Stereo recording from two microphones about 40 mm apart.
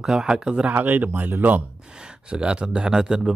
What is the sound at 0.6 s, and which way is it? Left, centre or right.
Speech, right.